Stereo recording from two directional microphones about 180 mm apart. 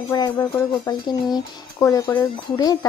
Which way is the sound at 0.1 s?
20° left (ahead or behind).